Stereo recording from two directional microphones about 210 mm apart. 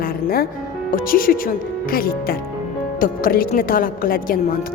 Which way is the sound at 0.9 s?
40° left (ahead or behind).